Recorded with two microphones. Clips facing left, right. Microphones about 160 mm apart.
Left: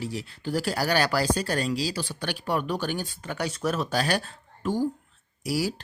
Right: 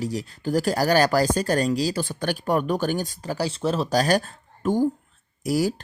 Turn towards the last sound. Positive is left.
turn(degrees=-45)  # may be behind; listen again after turning